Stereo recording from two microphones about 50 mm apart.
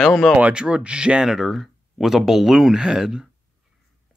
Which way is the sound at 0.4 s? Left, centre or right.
Centre.